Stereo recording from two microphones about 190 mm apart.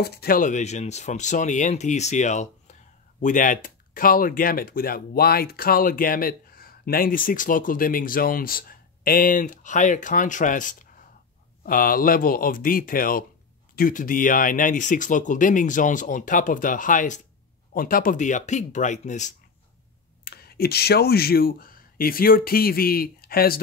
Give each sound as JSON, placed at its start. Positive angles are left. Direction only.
{"t": 0.0, "sound": "speech", "side_deg": 55}
{"t": 20.2, "sound": "speech", "side_deg": 55}